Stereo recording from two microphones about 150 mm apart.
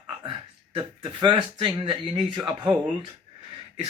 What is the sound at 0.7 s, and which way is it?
A man's voice, 30° right (ahead or behind).